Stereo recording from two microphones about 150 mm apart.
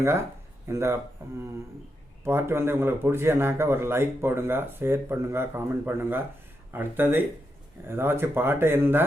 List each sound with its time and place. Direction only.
0.7 s speech: 15° right (ahead or behind)
2.2 s speech: 15° right (ahead or behind)